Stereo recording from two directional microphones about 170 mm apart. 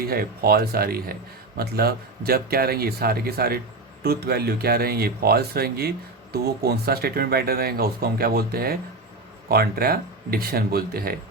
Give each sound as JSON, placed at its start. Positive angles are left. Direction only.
{"t": 0.0, "sound": "speech", "side_deg": -60}